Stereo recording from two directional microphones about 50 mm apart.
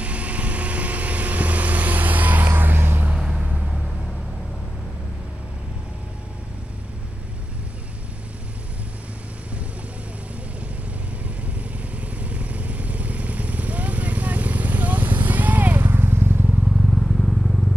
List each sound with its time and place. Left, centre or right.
0.0 s vehicle: right
3.2 s vehicle: centre
11.7 s vehicle: right
16.7 s vehicle: centre